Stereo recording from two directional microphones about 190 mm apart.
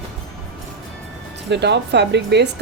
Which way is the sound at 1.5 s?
65° right (ahead or behind).